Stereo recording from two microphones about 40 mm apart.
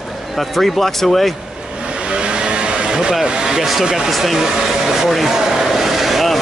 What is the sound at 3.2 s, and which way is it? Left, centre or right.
Speech, centre.